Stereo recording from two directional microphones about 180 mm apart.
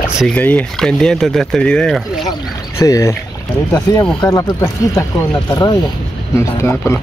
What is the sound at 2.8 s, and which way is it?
Speech, 15° left (ahead or behind).